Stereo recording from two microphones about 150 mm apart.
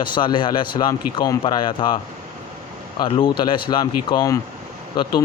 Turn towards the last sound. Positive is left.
turn(degrees=30)  # may be behind; listen again after turning